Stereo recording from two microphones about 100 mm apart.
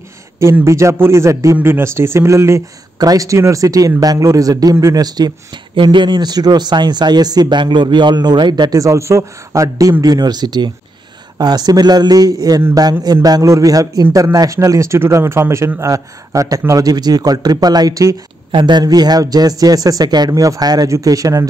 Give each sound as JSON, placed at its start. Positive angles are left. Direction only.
{"t": 0.7, "sound": "a man's voice", "side_deg": -30}
{"t": 18.5, "sound": "speech", "side_deg": -50}